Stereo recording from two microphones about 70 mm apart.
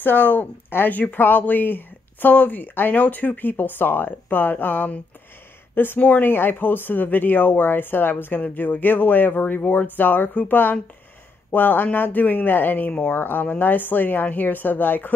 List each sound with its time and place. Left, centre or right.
0.0 s speech: left